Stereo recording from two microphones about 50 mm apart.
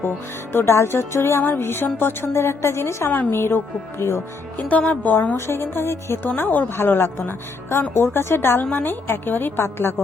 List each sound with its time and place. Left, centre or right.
0.5 s speech: left
1.4 s a woman's voice: left
2.3 s speech: left
3.1 s a woman's voice: left
3.3 s speech: left
4.9 s a woman's voice: left
5.5 s speech: left
6.2 s a woman's voice: left
8.7 s a woman's voice: left